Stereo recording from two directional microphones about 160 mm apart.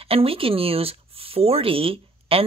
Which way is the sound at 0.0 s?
35° right (ahead or behind).